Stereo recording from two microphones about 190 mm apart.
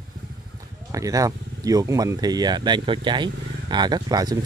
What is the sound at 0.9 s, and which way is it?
Speech, 15° right (ahead or behind).